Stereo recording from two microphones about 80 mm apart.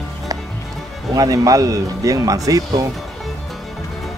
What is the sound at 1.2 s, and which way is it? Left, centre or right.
Speech, right.